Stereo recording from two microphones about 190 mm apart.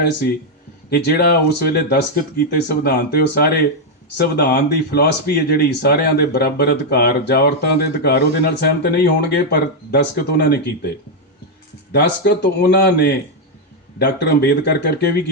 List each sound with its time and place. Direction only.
0.9 s speech: 55° left (ahead or behind)